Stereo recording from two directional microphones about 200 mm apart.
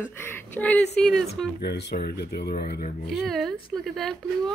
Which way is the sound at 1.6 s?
55° left (ahead or behind).